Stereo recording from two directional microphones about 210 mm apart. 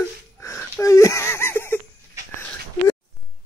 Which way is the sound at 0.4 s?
15° left (ahead or behind).